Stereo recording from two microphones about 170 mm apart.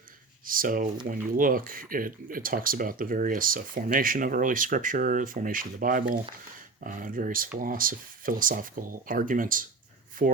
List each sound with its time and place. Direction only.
0.4 s speech: 55° right (ahead or behind)